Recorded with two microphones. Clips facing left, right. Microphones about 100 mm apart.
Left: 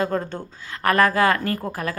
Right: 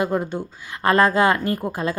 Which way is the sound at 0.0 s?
15° right (ahead or behind).